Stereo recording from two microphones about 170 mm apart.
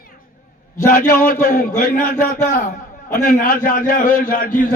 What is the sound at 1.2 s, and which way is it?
A man's voice, 45° left (ahead or behind).